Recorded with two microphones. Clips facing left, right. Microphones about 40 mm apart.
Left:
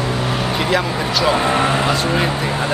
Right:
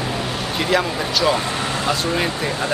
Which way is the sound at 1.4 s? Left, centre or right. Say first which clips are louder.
Left 7 dB; left.